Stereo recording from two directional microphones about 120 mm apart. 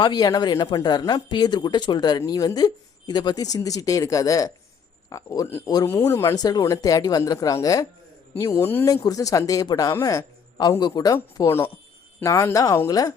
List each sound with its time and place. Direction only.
0.0 s speech: 35° left (ahead or behind)